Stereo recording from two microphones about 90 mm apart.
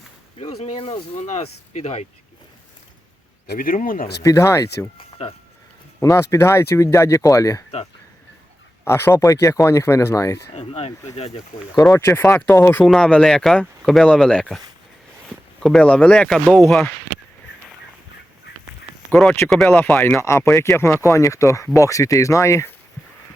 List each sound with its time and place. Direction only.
0.5 s speech: 85° left
4.2 s speech: 35° left (ahead or behind)
6.0 s speech: 35° left (ahead or behind)
8.8 s speech: 25° left (ahead or behind)
10.6 s speech: 90° left
11.9 s speech: 25° left (ahead or behind)
12.8 s speech: 5° left (ahead or behind)
15.6 s speech: 5° left (ahead or behind)
19.5 s speech: 5° left (ahead or behind)
20.1 s speech: 30° left (ahead or behind)